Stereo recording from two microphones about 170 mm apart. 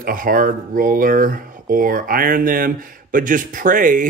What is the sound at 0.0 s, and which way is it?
Speech, 55° right (ahead or behind).